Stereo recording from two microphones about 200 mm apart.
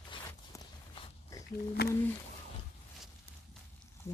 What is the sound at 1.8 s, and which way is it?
Speech, 50° left (ahead or behind).